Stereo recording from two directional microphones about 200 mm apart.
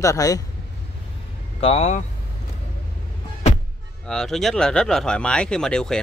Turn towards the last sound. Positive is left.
turn(degrees=5)  # may be behind; listen again after turning